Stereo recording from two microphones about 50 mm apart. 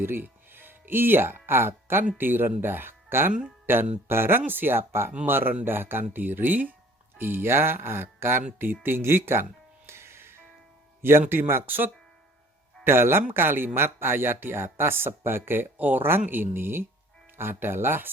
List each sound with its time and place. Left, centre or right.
0.0 s music: right
2.1 s speech: right
9.8 s music: right
11.0 s speech: right
12.8 s speech: right